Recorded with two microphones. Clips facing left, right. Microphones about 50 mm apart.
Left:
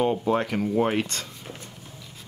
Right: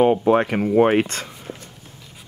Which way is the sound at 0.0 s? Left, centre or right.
Right.